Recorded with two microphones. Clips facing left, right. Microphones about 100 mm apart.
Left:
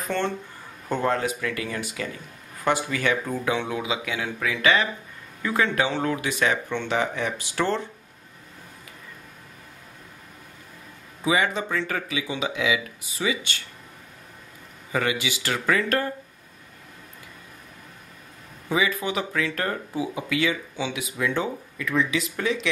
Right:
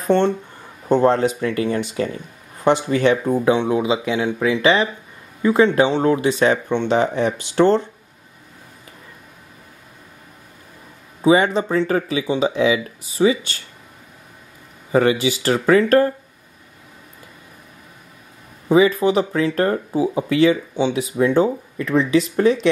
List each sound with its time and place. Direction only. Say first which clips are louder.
0.8 s speech: right 9 dB; 25° right (ahead or behind)
11.2 s speech: right 8 dB; 35° right (ahead or behind)
14.9 s speech: right 9 dB; 35° right (ahead or behind)
18.7 s speech: right 10 dB; 35° right (ahead or behind)